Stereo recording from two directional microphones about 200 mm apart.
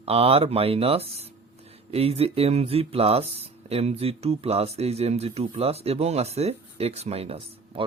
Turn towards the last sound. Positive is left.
turn(degrees=-30)  # may be behind; listen again after turning